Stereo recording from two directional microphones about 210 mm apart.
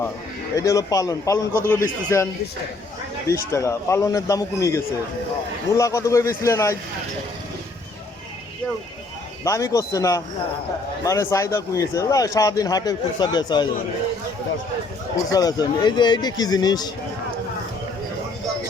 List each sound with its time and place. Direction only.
0.5 s a man's voice: 15° left (ahead or behind)
9.4 s a man's voice: 15° left (ahead or behind)
15.3 s speech: 15° left (ahead or behind)